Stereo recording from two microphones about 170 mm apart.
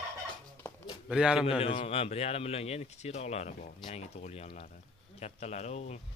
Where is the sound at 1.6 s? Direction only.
35° left (ahead or behind).